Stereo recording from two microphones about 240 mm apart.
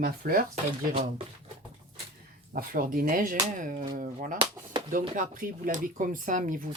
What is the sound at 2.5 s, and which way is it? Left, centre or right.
Speech, right.